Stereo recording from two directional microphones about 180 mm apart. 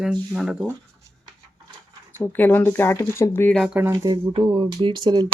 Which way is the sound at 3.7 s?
15° right (ahead or behind).